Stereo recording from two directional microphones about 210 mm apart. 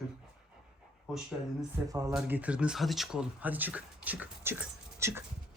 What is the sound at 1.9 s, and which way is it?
Speech, 15° right (ahead or behind).